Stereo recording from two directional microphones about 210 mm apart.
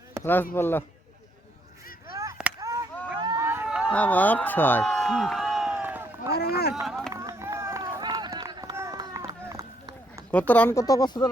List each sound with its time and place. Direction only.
0.2 s speech: 10° left (ahead or behind)
2.1 s chop: 15° right (ahead or behind)
3.2 s a sound: 20° right (ahead or behind)
3.4 s a sound: 10° right (ahead or behind)
3.9 s speech: 5° left (ahead or behind); by 6.1 s 10° right (ahead or behind)
6.3 s speech: 50° left (ahead or behind)
7.1 s run: 15° right (ahead or behind)
10.3 s speech: 5° left (ahead or behind)